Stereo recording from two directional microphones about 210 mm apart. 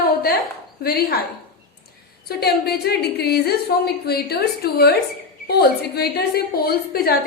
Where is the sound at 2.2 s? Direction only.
50° left (ahead or behind).